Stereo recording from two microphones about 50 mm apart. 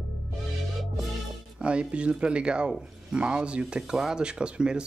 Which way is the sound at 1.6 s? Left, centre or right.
Right.